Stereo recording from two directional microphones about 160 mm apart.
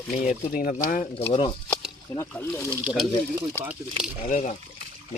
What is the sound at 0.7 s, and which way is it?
Speech, 45° left (ahead or behind).